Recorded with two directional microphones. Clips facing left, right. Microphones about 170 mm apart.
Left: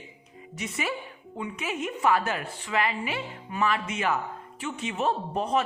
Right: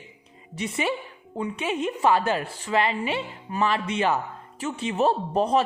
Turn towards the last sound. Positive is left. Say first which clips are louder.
# right 5 dB
turn(degrees=-35)  # may be behind; listen again after turning